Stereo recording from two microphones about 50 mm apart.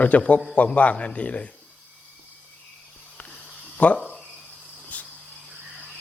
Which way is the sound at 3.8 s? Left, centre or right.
Left.